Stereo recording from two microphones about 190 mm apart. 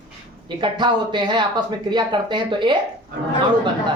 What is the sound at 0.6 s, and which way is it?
Speech, 25° right (ahead or behind).